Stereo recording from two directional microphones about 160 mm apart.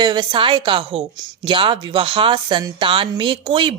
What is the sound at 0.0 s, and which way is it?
Speech, 30° right (ahead or behind).